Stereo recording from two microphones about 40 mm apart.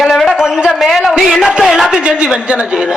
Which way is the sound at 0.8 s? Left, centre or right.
Centre.